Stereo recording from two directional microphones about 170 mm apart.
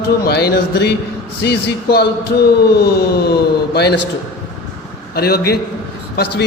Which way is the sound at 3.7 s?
75° left (ahead or behind).